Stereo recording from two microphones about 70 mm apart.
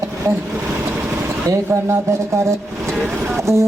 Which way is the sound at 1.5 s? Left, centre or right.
Right.